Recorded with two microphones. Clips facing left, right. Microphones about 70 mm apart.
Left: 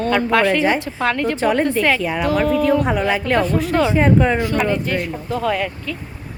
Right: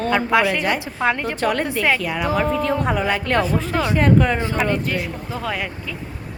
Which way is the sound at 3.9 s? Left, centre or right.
Centre.